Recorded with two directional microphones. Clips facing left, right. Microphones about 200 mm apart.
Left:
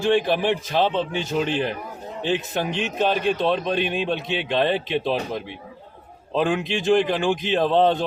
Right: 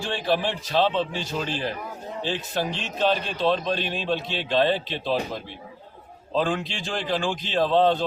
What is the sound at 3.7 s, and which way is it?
Speech, 55° left (ahead or behind).